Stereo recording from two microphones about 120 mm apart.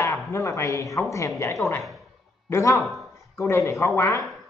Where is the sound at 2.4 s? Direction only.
25° left (ahead or behind).